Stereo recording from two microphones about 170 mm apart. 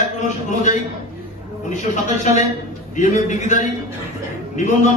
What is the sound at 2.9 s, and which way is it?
Speech, 45° left (ahead or behind).